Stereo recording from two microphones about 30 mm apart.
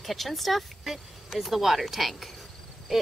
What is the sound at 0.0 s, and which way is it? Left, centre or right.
Speech, centre.